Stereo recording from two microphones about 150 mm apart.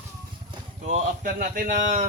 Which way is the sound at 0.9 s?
55° right (ahead or behind).